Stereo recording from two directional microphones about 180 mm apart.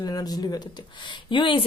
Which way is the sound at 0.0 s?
20° left (ahead or behind).